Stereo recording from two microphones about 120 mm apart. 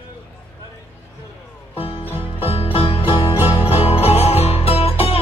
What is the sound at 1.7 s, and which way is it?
Music, 50° left (ahead or behind).